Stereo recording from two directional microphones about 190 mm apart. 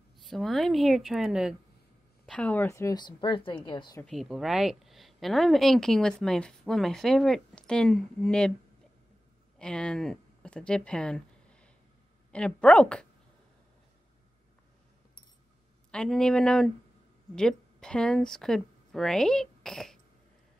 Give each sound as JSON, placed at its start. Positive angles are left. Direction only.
{"t": 0.2, "sound": "a woman's voice", "side_deg": 0}
{"t": 4.0, "sound": "a woman's voice", "side_deg": 0}
{"t": 9.6, "sound": "a woman's voice", "side_deg": 5}
{"t": 15.9, "sound": "a woman's voice", "side_deg": 5}